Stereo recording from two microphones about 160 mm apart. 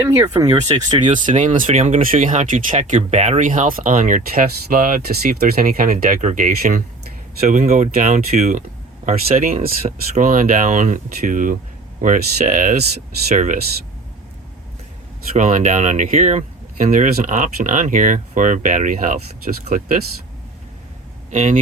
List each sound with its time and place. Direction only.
0.4 s speech: 25° right (ahead or behind)
1.3 s speech: 50° right (ahead or behind)
15.4 s speech: 55° right (ahead or behind)
21.2 s speech: 50° right (ahead or behind)